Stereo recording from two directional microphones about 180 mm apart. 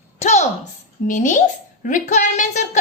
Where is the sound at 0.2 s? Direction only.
40° left (ahead or behind).